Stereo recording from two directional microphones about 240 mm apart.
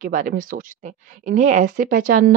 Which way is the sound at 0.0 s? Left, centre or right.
Right.